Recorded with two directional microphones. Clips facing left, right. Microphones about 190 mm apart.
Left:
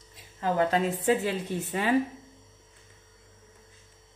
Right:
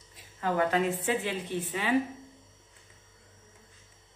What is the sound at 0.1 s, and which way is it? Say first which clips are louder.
A woman's voice: left 2 dB; 30° left (ahead or behind).